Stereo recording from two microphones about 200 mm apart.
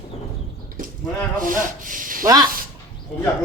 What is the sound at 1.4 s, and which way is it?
Speech, 40° right (ahead or behind).